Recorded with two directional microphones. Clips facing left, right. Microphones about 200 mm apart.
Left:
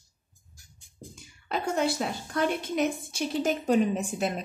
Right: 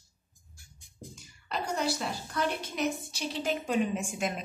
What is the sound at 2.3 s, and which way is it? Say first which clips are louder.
A woman's voice: left 6 dB; 50° left (ahead or behind).